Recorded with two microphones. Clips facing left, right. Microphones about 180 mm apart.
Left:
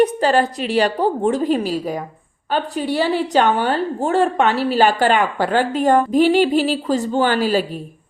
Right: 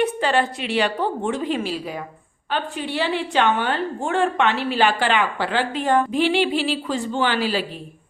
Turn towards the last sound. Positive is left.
turn(degrees=45)  # may be behind; listen again after turning